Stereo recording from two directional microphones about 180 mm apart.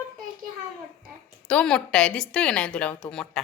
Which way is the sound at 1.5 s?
5° left (ahead or behind).